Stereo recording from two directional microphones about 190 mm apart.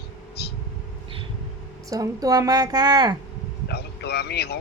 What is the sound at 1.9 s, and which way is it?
A woman's voice, 20° right (ahead or behind).